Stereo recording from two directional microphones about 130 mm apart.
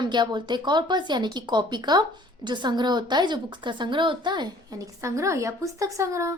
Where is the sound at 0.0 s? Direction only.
35° right (ahead or behind).